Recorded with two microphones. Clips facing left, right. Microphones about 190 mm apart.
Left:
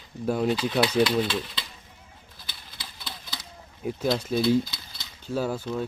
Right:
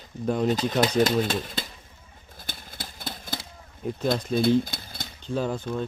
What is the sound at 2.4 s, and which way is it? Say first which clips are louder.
Typewriter: right 7 dB; 50° right (ahead or behind).